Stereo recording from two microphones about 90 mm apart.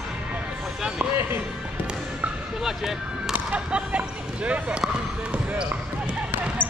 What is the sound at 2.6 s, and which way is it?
Music, 5° right (ahead or behind).